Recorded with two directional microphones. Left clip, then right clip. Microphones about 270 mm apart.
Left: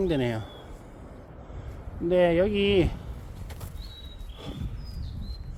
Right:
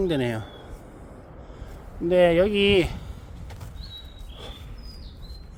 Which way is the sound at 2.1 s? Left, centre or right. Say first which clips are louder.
Right 4 dB; centre.